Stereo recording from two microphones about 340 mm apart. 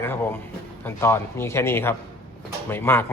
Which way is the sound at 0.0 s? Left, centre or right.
Centre.